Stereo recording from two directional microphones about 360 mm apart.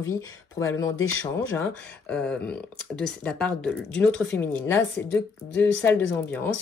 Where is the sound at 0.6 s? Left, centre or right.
Centre.